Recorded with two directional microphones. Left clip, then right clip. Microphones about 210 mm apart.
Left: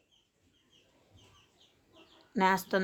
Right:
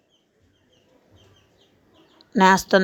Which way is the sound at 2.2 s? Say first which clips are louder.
Right 12 dB; 35° right (ahead or behind).